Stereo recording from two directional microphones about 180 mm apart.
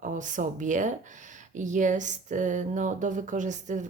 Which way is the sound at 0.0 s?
45° right (ahead or behind).